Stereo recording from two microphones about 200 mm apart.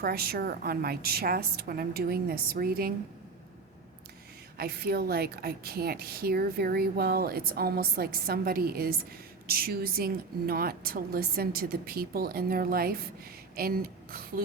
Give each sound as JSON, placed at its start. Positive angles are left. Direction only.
{"t": 0.0, "sound": "a woman's voice", "side_deg": -50}
{"t": 4.5, "sound": "a woman's voice", "side_deg": -50}